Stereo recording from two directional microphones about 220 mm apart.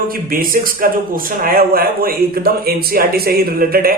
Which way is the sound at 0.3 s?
40° right (ahead or behind).